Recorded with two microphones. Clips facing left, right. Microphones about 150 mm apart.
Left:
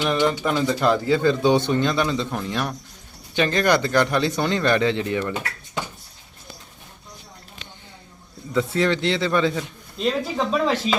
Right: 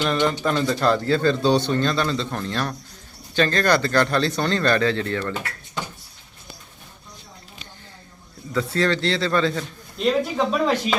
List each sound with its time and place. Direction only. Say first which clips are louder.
0.0 s speech: even; 10° left (ahead or behind)
8.5 s speech: left 1 dB; 15° left (ahead or behind)
10.0 s speech: right 2 dB; centre (ahead or behind)